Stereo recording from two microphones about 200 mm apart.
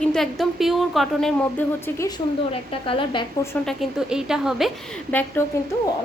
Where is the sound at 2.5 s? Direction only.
25° left (ahead or behind).